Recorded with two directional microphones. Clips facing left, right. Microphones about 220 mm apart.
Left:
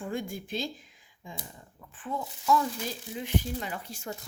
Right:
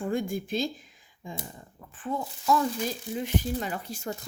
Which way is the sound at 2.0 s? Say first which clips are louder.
Right 3 dB; 40° right (ahead or behind).